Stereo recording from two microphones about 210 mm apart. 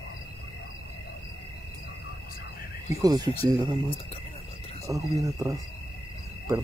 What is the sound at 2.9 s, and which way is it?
Speech, 15° right (ahead or behind).